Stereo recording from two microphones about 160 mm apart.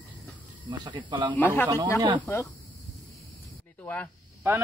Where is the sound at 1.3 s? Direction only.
10° left (ahead or behind).